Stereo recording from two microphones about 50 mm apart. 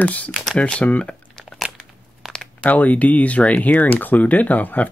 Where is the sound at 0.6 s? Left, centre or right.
Left.